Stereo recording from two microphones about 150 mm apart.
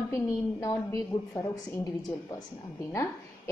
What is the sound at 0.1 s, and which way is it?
A woman's voice, 20° left (ahead or behind).